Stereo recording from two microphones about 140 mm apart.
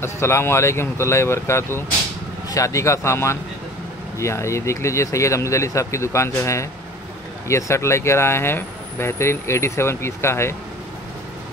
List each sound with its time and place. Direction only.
0.0 s speech: 20° left (ahead or behind)